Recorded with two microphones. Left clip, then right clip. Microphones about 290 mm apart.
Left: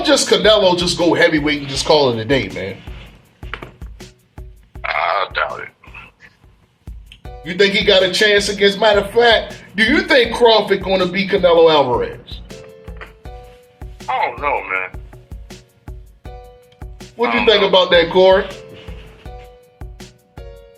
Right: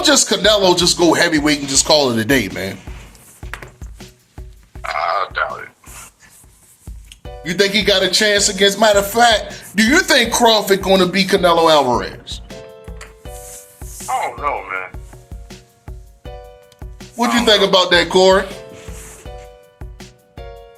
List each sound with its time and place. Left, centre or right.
0.0 s speech: right
3.9 s music: centre
7.4 s speech: right
12.5 s music: centre
17.5 s speech: right
19.8 s music: centre